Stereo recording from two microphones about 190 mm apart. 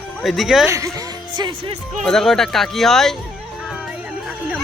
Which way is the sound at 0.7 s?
15° right (ahead or behind).